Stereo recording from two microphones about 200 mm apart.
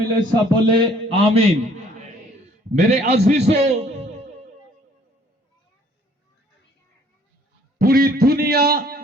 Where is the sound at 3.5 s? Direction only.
35° right (ahead or behind).